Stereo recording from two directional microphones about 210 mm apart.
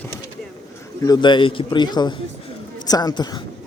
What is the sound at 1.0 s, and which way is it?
Speech, 20° left (ahead or behind).